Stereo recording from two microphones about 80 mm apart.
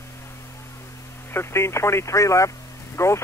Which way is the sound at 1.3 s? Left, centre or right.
Left.